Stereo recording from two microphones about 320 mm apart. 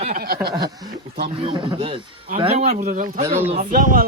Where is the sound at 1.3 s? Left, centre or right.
Centre.